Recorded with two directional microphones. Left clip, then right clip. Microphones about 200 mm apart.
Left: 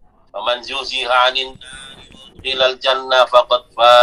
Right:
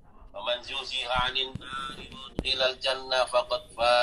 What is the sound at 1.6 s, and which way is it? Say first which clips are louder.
Music: even; 40° right (ahead or behind).